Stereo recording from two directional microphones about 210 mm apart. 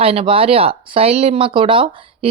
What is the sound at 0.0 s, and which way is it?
Speech, 25° right (ahead or behind).